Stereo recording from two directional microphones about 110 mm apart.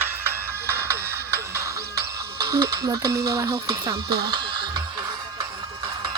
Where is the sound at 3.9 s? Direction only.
45° right (ahead or behind).